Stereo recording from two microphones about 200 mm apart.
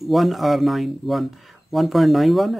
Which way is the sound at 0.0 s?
Centre (ahead or behind).